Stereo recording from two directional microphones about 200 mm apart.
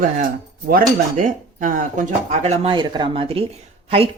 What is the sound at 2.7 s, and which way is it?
A woman's voice, 20° right (ahead or behind).